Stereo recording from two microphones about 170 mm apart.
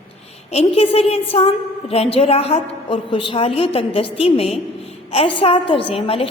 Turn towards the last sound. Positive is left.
turn(degrees=35)  # may be behind; listen again after turning